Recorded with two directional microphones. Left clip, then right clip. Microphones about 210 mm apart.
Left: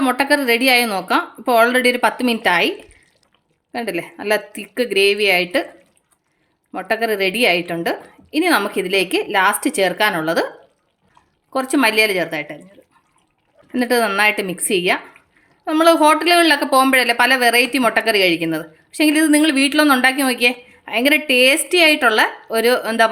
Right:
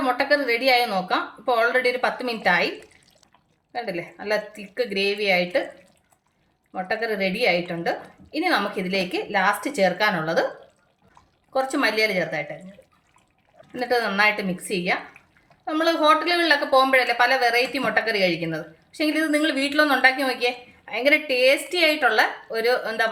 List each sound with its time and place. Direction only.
0.0 s speech: 55° left (ahead or behind)
6.7 s speech: 55° left (ahead or behind)
11.5 s speech: 50° left (ahead or behind)
13.7 s speech: 55° left (ahead or behind)